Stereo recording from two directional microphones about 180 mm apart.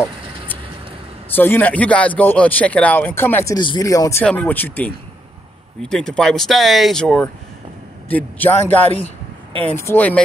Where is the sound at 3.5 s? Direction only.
25° left (ahead or behind).